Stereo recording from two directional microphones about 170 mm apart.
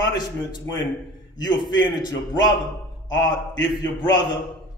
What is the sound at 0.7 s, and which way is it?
A man's voice, 20° left (ahead or behind).